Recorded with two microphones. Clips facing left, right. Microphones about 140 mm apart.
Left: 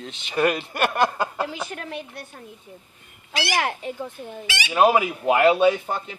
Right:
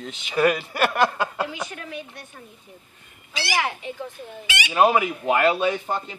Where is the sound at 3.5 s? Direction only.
50° left (ahead or behind).